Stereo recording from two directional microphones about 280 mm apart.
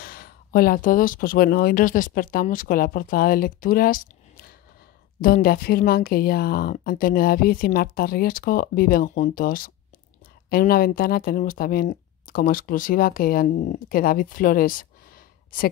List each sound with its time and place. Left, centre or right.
0.0 s speech: left